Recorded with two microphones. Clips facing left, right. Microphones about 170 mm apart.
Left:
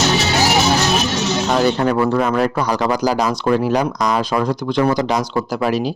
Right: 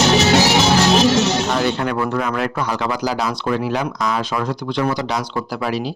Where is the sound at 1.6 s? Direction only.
40° left (ahead or behind).